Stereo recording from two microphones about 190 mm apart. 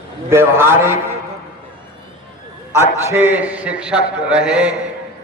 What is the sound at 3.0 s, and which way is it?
A man's voice, 10° right (ahead or behind).